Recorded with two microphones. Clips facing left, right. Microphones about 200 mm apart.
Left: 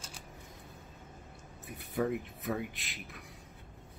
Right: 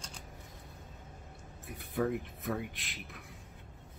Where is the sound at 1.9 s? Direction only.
Centre (ahead or behind).